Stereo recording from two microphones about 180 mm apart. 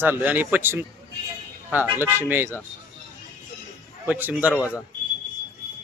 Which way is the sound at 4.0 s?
10° right (ahead or behind).